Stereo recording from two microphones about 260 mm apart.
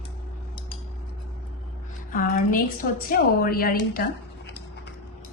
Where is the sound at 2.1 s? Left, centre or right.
Left.